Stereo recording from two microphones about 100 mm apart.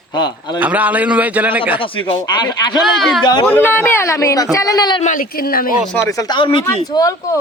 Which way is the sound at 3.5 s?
20° left (ahead or behind).